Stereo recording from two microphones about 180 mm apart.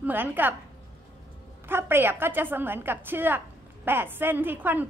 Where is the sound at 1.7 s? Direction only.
10° right (ahead or behind).